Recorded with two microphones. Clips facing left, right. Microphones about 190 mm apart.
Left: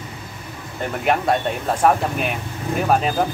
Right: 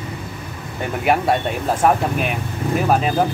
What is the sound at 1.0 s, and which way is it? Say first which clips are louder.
Speech: right 1 dB; 5° right (ahead or behind).